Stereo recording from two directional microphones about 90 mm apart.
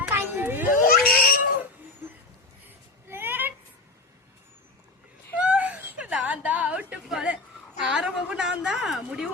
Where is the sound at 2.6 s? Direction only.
25° right (ahead or behind).